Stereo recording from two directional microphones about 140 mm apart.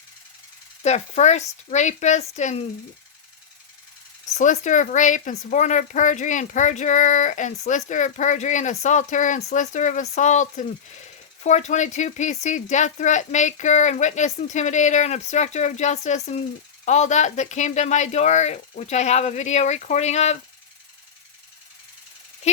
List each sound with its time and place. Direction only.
0.8 s speech: 55° left (ahead or behind)
4.4 s speech: 65° left (ahead or behind)